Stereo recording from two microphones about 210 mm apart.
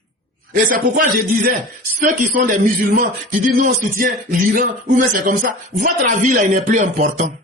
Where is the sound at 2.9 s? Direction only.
40° right (ahead or behind).